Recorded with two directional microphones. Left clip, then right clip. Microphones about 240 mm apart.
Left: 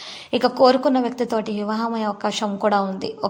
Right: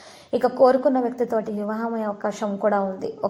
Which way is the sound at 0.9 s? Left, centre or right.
Left.